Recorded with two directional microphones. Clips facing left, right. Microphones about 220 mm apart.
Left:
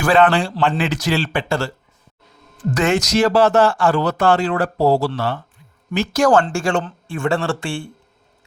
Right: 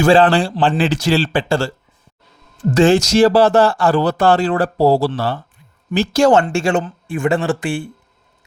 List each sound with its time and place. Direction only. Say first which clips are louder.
0.0 s speech: right 3 dB; 30° right (ahead or behind)